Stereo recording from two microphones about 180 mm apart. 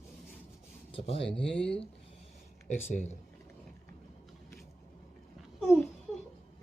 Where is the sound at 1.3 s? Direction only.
5° left (ahead or behind).